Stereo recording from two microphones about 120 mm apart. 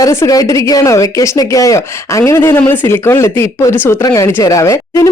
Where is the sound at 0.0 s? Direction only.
25° left (ahead or behind).